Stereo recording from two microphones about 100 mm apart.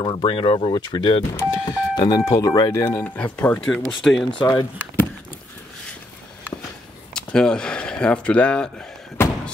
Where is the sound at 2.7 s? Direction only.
25° left (ahead or behind).